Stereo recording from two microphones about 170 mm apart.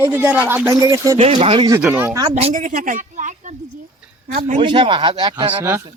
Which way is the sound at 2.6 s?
55° right (ahead or behind).